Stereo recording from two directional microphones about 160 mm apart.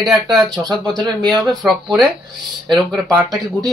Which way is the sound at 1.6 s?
5° right (ahead or behind).